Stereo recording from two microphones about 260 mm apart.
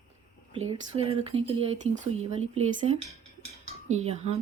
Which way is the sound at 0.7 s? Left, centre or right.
Right.